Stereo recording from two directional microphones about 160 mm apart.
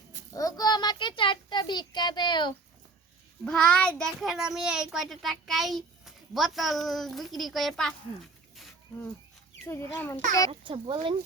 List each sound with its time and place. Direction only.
0.3 s a sound: 25° left (ahead or behind)
3.4 s a child's voice: 5° left (ahead or behind)
9.6 s a child's voice: 15° left (ahead or behind)
10.5 s a child's voice: 30° right (ahead or behind)